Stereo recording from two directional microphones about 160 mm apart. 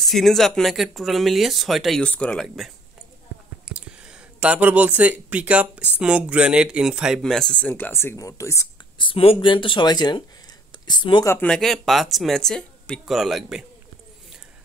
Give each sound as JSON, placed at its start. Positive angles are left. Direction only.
{"t": 0.0, "sound": "speech", "side_deg": 0}
{"t": 8.9, "sound": "speech", "side_deg": 35}
{"t": 11.2, "sound": "speech", "side_deg": 10}